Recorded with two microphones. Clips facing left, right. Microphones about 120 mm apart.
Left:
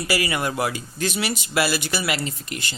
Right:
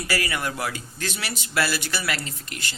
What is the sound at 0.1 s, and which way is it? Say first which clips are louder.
Speech: left 4 dB; 15° left (ahead or behind).